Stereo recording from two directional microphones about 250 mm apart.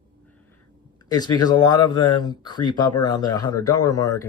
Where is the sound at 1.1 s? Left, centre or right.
Centre.